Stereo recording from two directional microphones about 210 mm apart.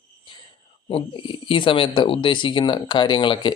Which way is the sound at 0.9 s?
25° left (ahead or behind).